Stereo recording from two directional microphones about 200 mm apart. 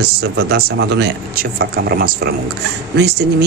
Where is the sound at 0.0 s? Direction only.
50° right (ahead or behind).